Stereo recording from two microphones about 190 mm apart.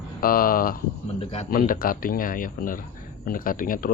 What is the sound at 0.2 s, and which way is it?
Speech, 50° left (ahead or behind).